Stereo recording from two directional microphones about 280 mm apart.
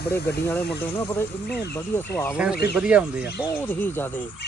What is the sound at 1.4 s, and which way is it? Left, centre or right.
Speech, left.